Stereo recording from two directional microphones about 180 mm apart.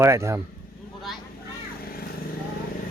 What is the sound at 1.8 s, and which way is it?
Vehicle, 55° left (ahead or behind).